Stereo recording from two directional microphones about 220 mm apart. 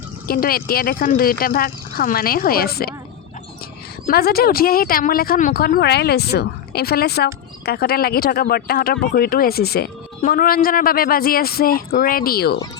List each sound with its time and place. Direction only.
0.3 s speech: 40° left (ahead or behind)
4.0 s speech: 45° left (ahead or behind)